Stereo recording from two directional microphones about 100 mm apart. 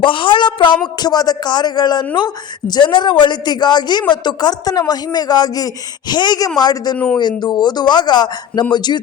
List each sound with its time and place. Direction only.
0.0 s a sound: 60° left (ahead or behind)
0.9 s a woman's voice: 40° left (ahead or behind)
6.9 s speech: 10° left (ahead or behind)
7.2 s a woman's voice: 45° left (ahead or behind)